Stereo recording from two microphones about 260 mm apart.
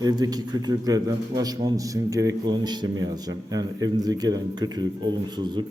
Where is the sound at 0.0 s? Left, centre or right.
Centre.